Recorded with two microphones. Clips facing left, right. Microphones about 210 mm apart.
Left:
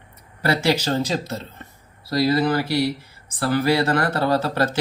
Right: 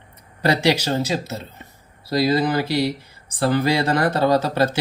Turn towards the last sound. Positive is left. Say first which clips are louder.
# right 2 dB
turn(degrees=-15)  # may be behind; listen again after turning